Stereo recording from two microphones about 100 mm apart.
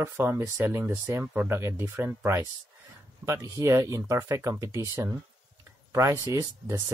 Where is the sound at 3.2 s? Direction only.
30° right (ahead or behind).